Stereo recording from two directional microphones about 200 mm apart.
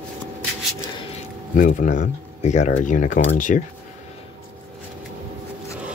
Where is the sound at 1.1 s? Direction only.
40° left (ahead or behind).